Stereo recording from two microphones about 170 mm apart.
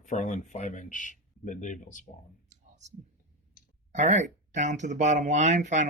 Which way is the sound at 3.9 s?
40° right (ahead or behind).